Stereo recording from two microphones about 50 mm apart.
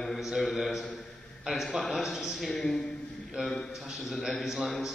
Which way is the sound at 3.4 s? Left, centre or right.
Right.